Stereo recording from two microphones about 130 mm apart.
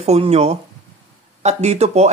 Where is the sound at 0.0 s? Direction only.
55° right (ahead or behind).